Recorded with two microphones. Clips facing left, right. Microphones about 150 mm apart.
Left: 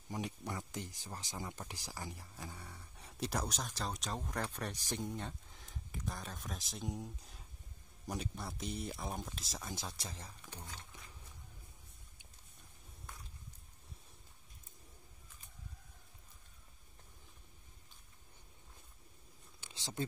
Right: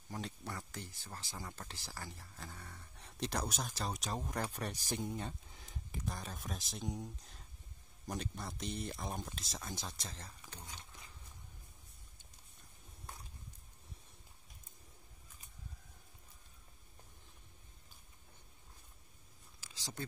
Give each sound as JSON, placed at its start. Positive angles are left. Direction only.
{"t": 0.1, "sound": "speech", "side_deg": 15}
{"t": 3.4, "sound": "speech", "side_deg": -5}
{"t": 19.6, "sound": "a sound", "side_deg": 25}